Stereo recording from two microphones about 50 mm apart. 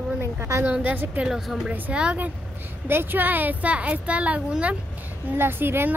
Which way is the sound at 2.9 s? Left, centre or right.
Right.